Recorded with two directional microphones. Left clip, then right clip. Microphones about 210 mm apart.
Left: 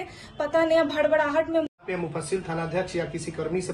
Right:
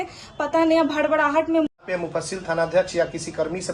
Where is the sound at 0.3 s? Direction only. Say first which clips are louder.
Right 2 dB; 15° right (ahead or behind).